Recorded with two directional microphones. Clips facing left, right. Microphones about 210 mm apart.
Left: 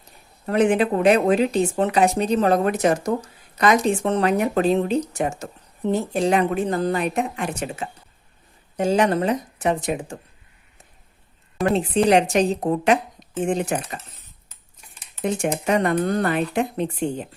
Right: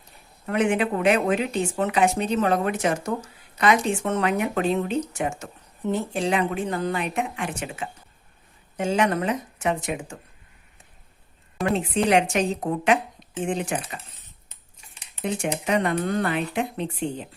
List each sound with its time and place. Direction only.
0.4 s speech: 35° left (ahead or behind)
11.6 s speech: 35° left (ahead or behind)
15.1 s speech: 45° left (ahead or behind)